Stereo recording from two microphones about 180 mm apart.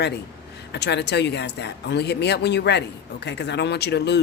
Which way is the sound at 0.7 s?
70° left (ahead or behind).